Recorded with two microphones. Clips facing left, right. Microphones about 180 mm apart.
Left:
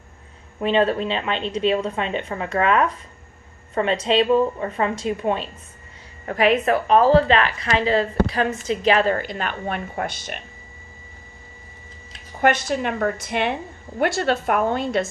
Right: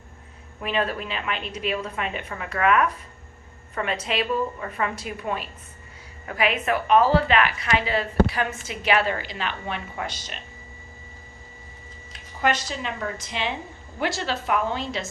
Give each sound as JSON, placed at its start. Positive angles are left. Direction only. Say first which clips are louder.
{"t": 0.6, "sound": "a woman's voice", "louder": "left 7 dB", "side_deg": 30}
{"t": 6.2, "sound": "a woman's voice", "louder": "left 6 dB", "side_deg": 40}
{"t": 9.1, "sound": "a woman's voice", "louder": "left 4 dB", "side_deg": 50}
{"t": 12.4, "sound": "a woman's voice", "louder": "left 6 dB", "side_deg": 55}